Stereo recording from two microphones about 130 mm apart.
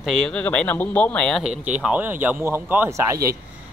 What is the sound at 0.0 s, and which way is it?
Speech, 5° left (ahead or behind).